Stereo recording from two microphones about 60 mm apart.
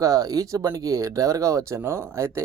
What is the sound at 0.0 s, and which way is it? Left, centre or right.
Speech, right.